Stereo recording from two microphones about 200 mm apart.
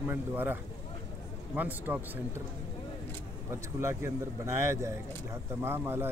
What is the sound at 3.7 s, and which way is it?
Speech, 15° right (ahead or behind).